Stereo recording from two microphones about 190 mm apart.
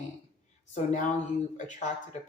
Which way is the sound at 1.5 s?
40° left (ahead or behind).